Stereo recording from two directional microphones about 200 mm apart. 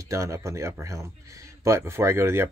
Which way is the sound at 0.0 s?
15° right (ahead or behind).